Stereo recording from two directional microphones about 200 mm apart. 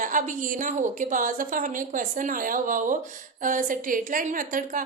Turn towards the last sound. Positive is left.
turn(degrees=-40)  # may be behind; listen again after turning